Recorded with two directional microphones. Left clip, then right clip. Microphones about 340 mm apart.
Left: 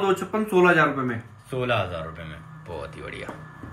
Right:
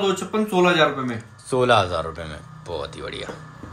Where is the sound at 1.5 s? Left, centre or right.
Centre.